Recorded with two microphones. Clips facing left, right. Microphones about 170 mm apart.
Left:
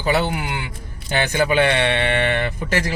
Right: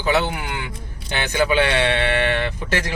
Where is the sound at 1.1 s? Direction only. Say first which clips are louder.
Left 1 dB; 45° left (ahead or behind).